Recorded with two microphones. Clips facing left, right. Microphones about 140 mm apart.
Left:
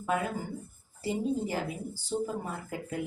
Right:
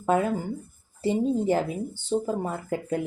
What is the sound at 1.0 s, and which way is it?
Speech, 25° right (ahead or behind).